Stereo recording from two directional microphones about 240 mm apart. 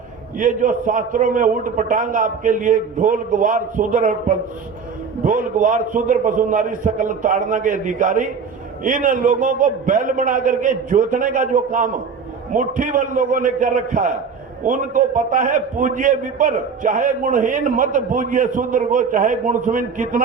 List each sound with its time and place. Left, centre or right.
0.3 s a man's voice: right